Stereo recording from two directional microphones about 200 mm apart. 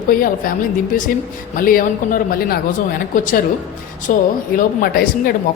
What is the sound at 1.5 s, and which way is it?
A man's voice, 45° left (ahead or behind).